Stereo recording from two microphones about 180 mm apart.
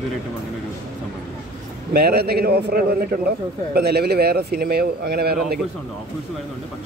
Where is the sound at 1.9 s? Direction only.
60° right (ahead or behind).